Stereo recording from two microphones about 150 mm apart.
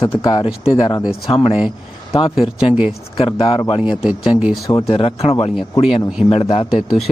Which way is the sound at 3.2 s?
30° left (ahead or behind).